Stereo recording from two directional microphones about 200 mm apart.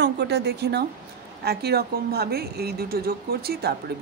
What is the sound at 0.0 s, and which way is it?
Speech, 60° right (ahead or behind).